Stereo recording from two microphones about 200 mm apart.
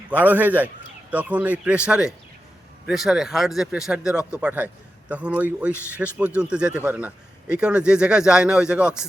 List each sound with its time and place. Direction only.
0.1 s speech: 10° right (ahead or behind)